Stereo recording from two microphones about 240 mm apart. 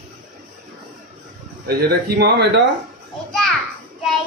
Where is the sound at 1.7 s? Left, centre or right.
Right.